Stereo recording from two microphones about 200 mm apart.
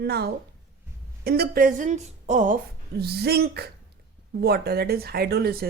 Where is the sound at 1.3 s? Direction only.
50° right (ahead or behind).